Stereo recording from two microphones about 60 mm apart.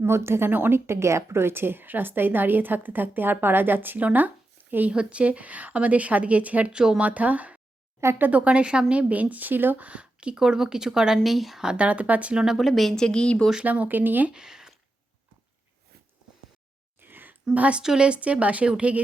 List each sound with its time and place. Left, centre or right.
0.0 s a woman's voice: right
0.9 s a woman's voice: right
4.9 s a woman's voice: centre
6.7 s speech: centre
7.0 s a woman's voice: right
12.5 s a woman's voice: centre
13.0 s a woman's voice: centre
13.7 s a woman's voice: right
14.3 s speech: centre
17.0 s a sound: right
17.5 s a woman's voice: right